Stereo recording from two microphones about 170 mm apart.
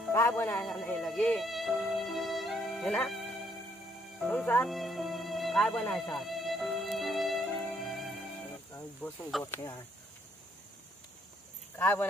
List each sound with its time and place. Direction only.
0.1 s speech: 15° left (ahead or behind)
4.2 s speech: 5° left (ahead or behind)
4.6 s music: centre (ahead or behind)
9.0 s speech: 5° left (ahead or behind)
11.7 s speech: 10° left (ahead or behind)